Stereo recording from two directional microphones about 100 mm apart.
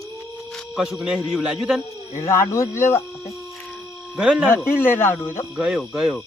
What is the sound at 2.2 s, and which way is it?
Speech, 25° left (ahead or behind).